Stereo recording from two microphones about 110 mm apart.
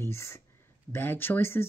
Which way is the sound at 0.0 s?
25° left (ahead or behind).